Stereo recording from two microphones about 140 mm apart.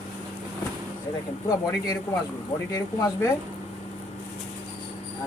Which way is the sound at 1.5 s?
25° left (ahead or behind).